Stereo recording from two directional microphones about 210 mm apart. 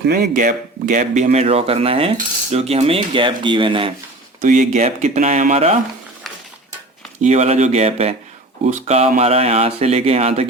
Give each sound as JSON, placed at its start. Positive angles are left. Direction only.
{"t": 0.0, "sound": "speech", "side_deg": -45}
{"t": 2.1, "sound": "cutlery", "side_deg": -30}
{"t": 4.4, "sound": "speech", "side_deg": -35}
{"t": 7.2, "sound": "speech", "side_deg": -30}